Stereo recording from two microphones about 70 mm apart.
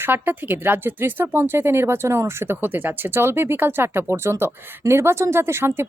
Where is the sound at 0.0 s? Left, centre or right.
Right.